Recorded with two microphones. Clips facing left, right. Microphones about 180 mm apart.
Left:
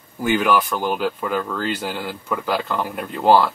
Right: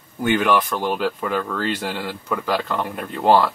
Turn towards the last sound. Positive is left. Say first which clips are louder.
# left 1 dB
turn(degrees=5)  # may be behind; listen again after turning